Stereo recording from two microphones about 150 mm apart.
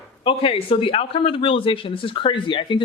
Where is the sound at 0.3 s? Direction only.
40° left (ahead or behind).